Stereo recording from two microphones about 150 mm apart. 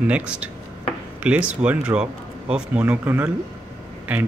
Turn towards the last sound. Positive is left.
turn(degrees=-10)  # may be behind; listen again after turning